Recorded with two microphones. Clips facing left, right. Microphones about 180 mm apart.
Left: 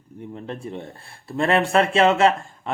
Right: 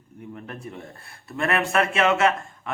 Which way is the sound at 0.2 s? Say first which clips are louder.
Left 4 dB; 30° left (ahead or behind).